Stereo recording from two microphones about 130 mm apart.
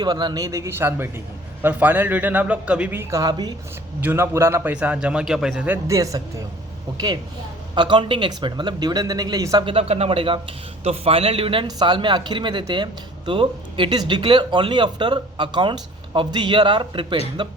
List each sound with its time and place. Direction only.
0.0 s a man's voice: 35° right (ahead or behind)
4.0 s a man's voice: 20° right (ahead or behind)
5.9 s a man's voice: 25° right (ahead or behind)
9.6 s speech: 50° right (ahead or behind); by 17.5 s 35° right (ahead or behind)